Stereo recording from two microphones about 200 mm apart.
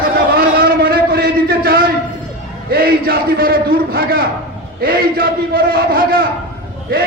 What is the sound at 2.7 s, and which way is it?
A man's voice, 50° right (ahead or behind).